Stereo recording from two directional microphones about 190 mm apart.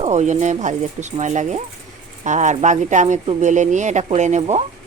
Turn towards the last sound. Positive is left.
turn(degrees=-40)  # may be behind; listen again after turning